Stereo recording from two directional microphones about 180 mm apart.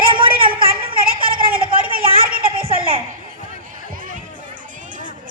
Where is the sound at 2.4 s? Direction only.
35° right (ahead or behind).